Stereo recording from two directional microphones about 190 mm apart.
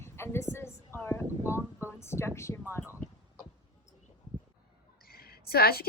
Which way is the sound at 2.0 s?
15° left (ahead or behind).